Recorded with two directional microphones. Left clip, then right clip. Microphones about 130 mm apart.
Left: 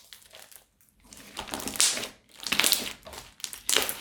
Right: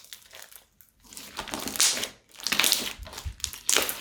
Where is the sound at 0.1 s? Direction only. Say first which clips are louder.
Right 4 dB; 5° right (ahead or behind).